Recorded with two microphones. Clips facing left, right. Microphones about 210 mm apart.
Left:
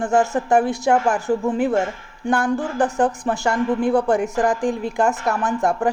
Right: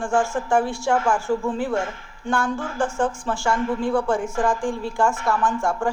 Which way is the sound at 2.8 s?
35° left (ahead or behind).